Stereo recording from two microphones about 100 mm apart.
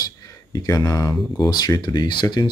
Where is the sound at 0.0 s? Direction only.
40° left (ahead or behind).